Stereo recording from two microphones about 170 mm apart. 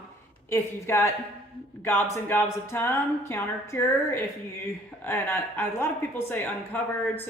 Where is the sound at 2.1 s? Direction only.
15° left (ahead or behind).